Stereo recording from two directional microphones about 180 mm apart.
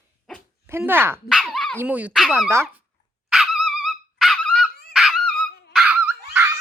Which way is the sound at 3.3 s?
Centre (ahead or behind).